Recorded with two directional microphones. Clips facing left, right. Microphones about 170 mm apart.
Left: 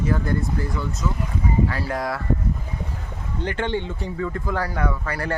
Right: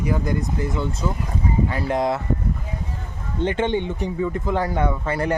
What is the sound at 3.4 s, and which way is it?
Speech, 20° right (ahead or behind).